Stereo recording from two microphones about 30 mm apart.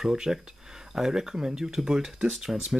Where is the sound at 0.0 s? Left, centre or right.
Centre.